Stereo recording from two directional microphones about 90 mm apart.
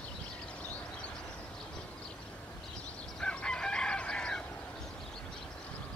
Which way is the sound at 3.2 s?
10° left (ahead or behind).